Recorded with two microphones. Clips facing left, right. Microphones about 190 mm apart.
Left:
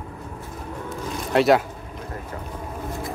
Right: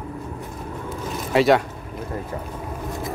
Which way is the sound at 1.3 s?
Centre (ahead or behind).